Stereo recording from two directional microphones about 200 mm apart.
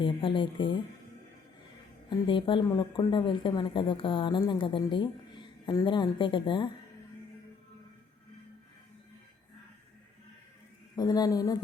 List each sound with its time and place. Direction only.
0.0 s a woman's voice: 25° left (ahead or behind)
2.0 s a woman's voice: 25° left (ahead or behind)
10.9 s a woman's voice: 20° left (ahead or behind)